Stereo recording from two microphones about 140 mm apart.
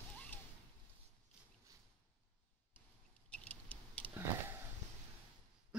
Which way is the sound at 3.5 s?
10° left (ahead or behind).